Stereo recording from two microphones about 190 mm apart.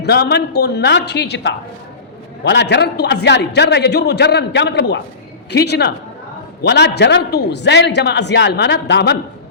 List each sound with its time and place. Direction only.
0.0 s a man's voice: 60° left (ahead or behind)